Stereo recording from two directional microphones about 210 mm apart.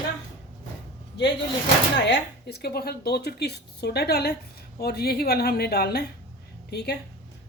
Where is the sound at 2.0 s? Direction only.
55° left (ahead or behind).